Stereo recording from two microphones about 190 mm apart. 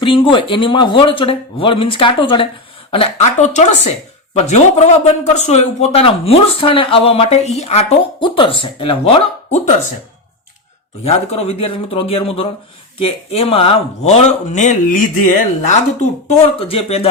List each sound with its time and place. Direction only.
0.0 s speech: 25° left (ahead or behind)
11.0 s speech: 35° left (ahead or behind)